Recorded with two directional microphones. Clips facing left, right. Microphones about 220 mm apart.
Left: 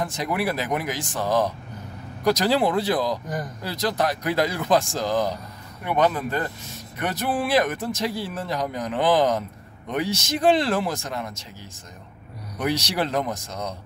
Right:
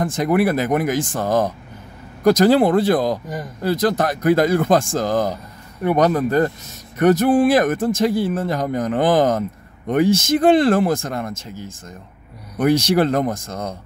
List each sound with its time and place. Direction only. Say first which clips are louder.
0.0 s speech: right 8 dB; 50° right (ahead or behind)